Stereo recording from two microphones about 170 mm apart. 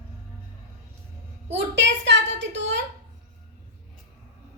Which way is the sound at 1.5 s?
90° right.